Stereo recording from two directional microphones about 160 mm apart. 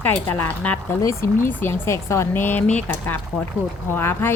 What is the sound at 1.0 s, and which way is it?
Speech, 20° left (ahead or behind).